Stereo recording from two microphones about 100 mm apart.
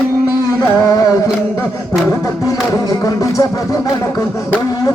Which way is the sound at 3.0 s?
35° left (ahead or behind).